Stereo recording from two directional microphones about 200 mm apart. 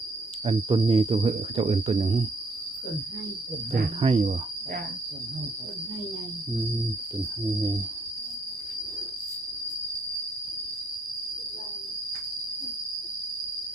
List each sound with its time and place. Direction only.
0.4 s speech: 25° right (ahead or behind)
4.0 s speech: 30° right (ahead or behind)